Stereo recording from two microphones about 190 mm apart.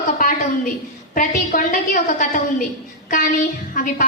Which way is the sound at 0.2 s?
45° left (ahead or behind).